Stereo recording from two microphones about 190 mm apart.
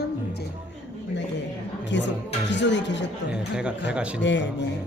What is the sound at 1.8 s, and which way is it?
Speech, 70° left (ahead or behind).